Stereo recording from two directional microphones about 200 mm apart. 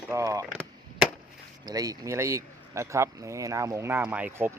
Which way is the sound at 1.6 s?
20° right (ahead or behind).